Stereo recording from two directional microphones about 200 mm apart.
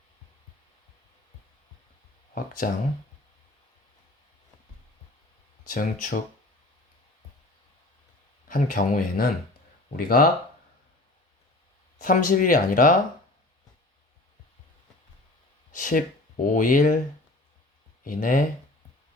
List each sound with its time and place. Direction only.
2.3 s speech: 45° left (ahead or behind)
5.6 s speech: 40° left (ahead or behind)
8.4 s speech: 45° left (ahead or behind)
11.9 s speech: 45° left (ahead or behind)
15.7 s speech: 45° left (ahead or behind)
18.0 s speech: 45° left (ahead or behind)